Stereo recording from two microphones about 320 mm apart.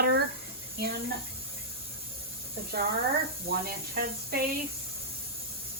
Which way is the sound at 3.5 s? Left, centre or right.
Right.